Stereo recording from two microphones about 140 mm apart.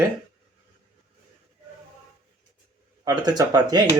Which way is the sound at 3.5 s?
30° right (ahead or behind).